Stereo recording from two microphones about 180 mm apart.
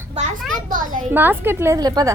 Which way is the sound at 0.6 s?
45° right (ahead or behind).